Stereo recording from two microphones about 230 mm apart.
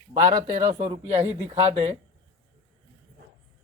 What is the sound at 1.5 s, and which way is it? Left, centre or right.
Speech, right.